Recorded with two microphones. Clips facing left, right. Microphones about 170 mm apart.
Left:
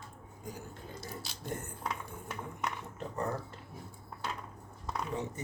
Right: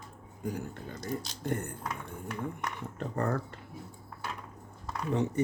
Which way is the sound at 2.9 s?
60° right (ahead or behind).